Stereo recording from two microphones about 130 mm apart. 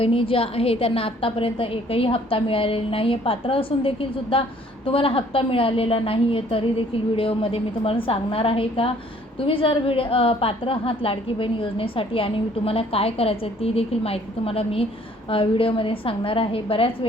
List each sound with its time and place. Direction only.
0.0 s a woman's voice: 45° left (ahead or behind)